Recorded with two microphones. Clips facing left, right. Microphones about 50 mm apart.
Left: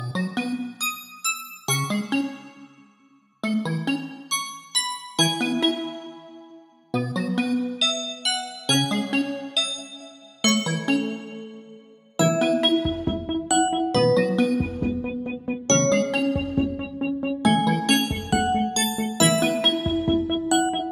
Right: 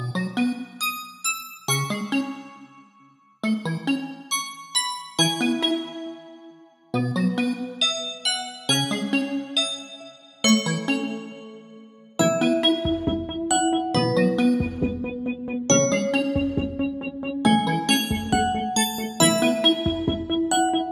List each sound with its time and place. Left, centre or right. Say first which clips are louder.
0.0 s music: right 3 dB; centre
3.3 s music: even; centre
6.9 s music: right 2 dB; centre
12.2 s music: even; centre